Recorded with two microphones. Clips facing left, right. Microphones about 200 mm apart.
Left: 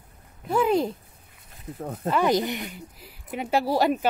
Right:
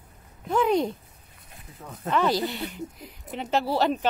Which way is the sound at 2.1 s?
15° left (ahead or behind).